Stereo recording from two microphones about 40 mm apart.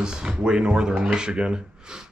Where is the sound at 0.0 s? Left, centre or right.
Centre.